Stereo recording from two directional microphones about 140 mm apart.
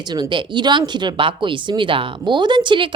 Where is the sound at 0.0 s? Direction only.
30° right (ahead or behind).